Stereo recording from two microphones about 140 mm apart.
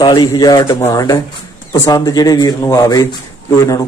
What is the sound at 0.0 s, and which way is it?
A man's voice, 30° left (ahead or behind).